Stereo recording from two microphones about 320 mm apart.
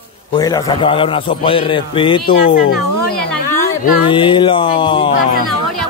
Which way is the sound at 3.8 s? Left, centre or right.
Centre.